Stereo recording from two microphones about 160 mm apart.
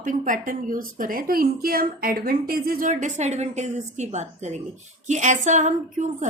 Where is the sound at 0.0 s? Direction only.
55° right (ahead or behind).